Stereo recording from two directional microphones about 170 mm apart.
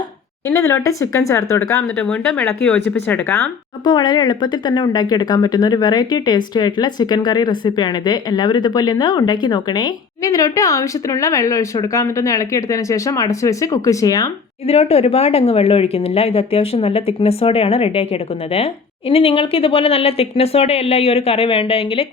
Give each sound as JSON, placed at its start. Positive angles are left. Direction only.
{"t": 0.4, "sound": "speech", "side_deg": 15}
{"t": 2.0, "sound": "speech", "side_deg": 5}
{"t": 2.9, "sound": "speech", "side_deg": 15}
{"t": 3.8, "sound": "speech", "side_deg": 25}
{"t": 14.7, "sound": "speech", "side_deg": 35}